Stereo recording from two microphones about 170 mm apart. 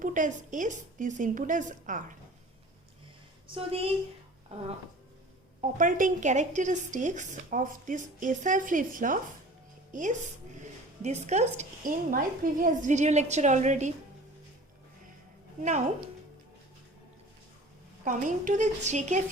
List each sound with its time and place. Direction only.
0.0 s speech: 50° right (ahead or behind)
3.4 s a woman's voice: 35° right (ahead or behind)
5.7 s speech: 50° right (ahead or behind)
18.0 s speech: 50° right (ahead or behind)